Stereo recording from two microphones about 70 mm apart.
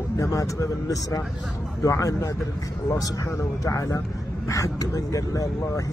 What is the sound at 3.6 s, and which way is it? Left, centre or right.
Speech, left.